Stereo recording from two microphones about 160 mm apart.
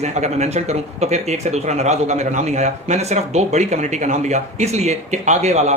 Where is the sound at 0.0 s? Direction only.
45° right (ahead or behind).